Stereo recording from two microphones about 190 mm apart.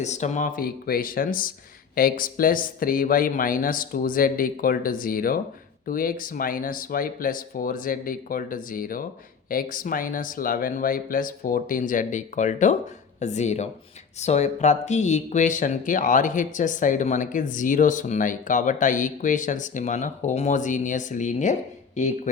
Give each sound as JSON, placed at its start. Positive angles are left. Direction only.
{"t": 0.0, "sound": "speech", "side_deg": 40}